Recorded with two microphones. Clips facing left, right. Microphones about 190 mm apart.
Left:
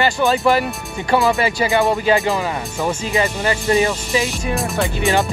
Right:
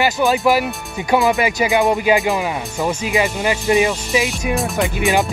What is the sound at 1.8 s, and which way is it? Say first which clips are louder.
Speech: right 1 dB; 10° right (ahead or behind).